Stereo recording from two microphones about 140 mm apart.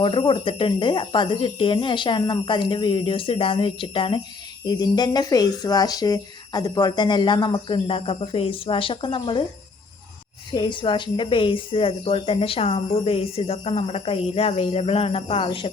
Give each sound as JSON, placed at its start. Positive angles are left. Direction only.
{"t": 0.0, "sound": "speech", "side_deg": 40}
{"t": 10.5, "sound": "speech", "side_deg": 35}